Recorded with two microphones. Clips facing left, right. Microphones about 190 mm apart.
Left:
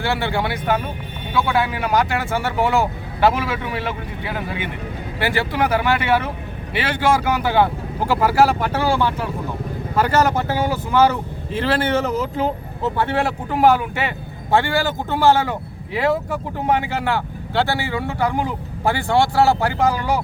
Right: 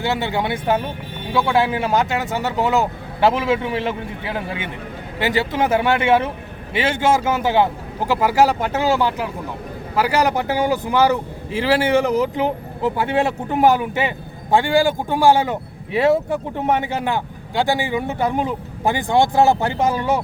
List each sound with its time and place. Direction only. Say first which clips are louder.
0.0 s speech: even; 20° right (ahead or behind)